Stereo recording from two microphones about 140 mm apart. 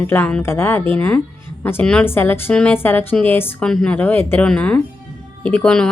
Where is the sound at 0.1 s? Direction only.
10° left (ahead or behind).